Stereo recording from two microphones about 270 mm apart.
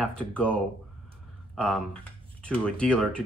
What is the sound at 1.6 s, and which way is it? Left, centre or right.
Speech, centre.